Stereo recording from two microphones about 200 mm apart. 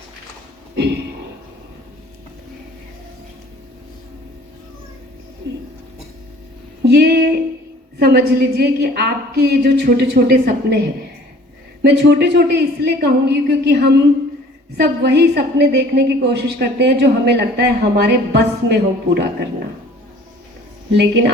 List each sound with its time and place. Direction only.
6.8 s a sound: 55° right (ahead or behind)
7.9 s a woman's voice: 55° right (ahead or behind)
11.8 s a woman's voice: 55° right (ahead or behind)